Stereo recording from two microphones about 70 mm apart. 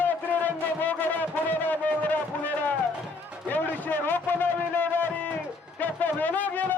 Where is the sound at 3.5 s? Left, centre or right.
Left.